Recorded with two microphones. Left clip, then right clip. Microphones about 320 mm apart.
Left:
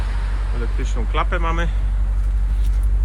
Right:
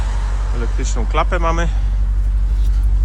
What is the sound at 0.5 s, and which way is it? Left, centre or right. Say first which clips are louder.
Speech: right 4 dB; centre.